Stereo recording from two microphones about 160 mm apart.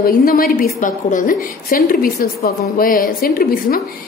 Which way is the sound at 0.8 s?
55° left (ahead or behind).